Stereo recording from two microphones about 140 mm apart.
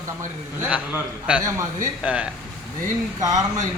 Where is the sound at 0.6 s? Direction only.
10° right (ahead or behind).